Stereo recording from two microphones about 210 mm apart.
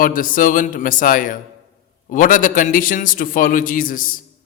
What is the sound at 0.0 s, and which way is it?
A man's voice, 40° left (ahead or behind).